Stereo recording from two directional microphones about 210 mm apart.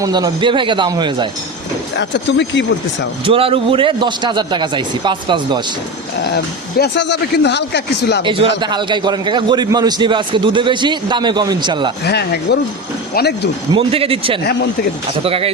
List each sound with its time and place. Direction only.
0.0 s a man's voice: 20° right (ahead or behind)
2.0 s speech: 55° left (ahead or behind)
3.2 s a man's voice: 25° right (ahead or behind)
6.3 s speech: 50° left (ahead or behind)
8.2 s a man's voice: 25° right (ahead or behind)
12.0 s speech: 50° left (ahead or behind)
13.7 s a man's voice: 25° right (ahead or behind)
14.4 s speech: 55° left (ahead or behind)
15.2 s a man's voice: 25° right (ahead or behind)